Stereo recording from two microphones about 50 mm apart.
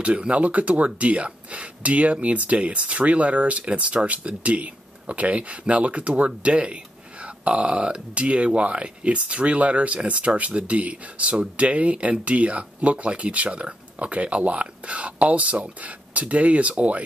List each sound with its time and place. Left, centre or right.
0.0 s speech: right